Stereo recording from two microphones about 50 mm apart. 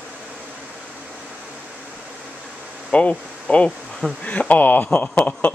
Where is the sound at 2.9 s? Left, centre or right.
Left.